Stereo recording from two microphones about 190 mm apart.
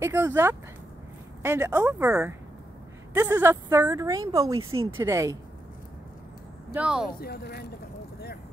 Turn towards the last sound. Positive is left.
turn(degrees=55)  # may be behind; listen again after turning